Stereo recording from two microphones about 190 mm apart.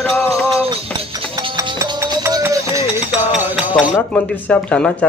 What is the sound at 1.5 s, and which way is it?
Music, 15° right (ahead or behind).